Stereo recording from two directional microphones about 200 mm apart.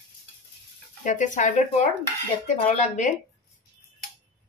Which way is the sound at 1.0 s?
40° left (ahead or behind).